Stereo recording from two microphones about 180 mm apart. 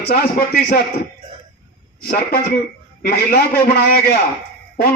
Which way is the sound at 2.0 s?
55° left (ahead or behind).